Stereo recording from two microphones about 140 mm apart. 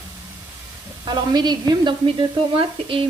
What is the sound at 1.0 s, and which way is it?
Sizzle, 30° right (ahead or behind).